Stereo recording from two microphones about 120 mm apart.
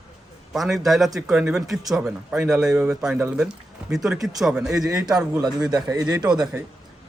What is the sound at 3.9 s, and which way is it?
Speech, 5° right (ahead or behind).